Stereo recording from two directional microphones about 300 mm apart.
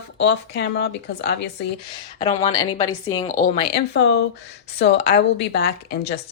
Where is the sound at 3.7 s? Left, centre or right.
Left.